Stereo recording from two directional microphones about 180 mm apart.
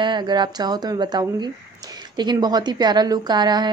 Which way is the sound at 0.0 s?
25° right (ahead or behind).